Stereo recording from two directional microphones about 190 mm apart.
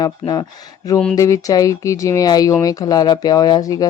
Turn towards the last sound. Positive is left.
turn(degrees=20)  # may be behind; listen again after turning